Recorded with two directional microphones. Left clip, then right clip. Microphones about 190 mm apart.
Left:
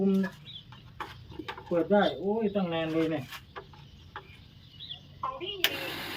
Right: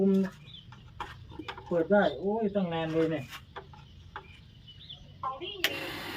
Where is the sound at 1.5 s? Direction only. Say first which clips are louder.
Even; 5° right (ahead or behind).